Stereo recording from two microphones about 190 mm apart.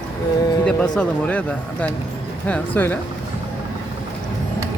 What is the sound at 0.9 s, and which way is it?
Speech, 5° left (ahead or behind).